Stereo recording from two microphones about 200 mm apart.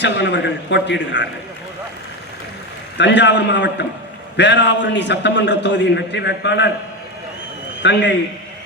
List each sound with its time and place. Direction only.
0.0 s a man's voice: 60° left (ahead or behind)
3.0 s a man's voice: 60° left (ahead or behind)
7.8 s a man's voice: 60° left (ahead or behind)